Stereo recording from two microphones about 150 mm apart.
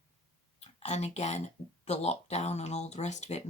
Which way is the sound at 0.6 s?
45° left (ahead or behind).